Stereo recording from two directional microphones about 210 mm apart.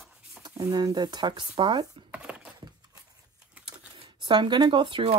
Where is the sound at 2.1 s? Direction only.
5° right (ahead or behind).